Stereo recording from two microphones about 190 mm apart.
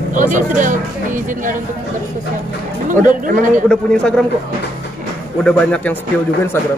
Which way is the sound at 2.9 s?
45° right (ahead or behind).